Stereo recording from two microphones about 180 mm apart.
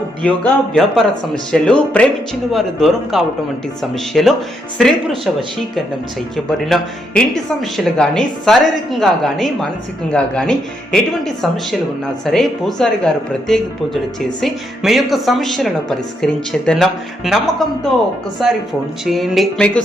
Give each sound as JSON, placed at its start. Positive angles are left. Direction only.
{"t": 0.2, "sound": "a woman's voice", "side_deg": 5}
{"t": 6.3, "sound": "a woman's voice", "side_deg": 5}
{"t": 12.2, "sound": "a woman's voice", "side_deg": 0}
{"t": 14.4, "sound": "a woman's voice", "side_deg": 0}